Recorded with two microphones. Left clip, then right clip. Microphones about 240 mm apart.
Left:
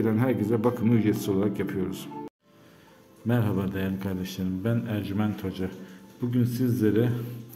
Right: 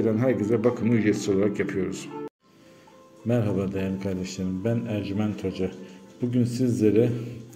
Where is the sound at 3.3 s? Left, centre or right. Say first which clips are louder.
Right 3 dB; centre.